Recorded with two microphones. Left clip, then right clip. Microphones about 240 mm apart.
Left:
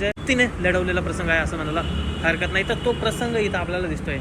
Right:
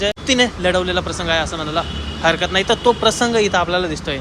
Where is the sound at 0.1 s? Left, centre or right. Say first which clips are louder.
Right 4 dB; right.